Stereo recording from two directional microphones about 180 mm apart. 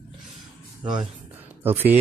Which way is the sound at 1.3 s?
10° right (ahead or behind).